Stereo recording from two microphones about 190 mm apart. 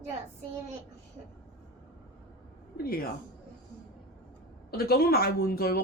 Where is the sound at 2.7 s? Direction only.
50° left (ahead or behind).